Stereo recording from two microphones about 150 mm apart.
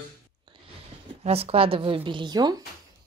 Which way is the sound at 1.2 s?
40° right (ahead or behind).